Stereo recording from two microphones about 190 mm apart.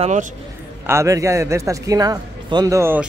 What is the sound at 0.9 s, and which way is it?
Speech, 15° right (ahead or behind).